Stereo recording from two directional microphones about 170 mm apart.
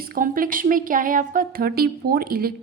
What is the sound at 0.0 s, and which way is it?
A woman's voice, 55° right (ahead or behind).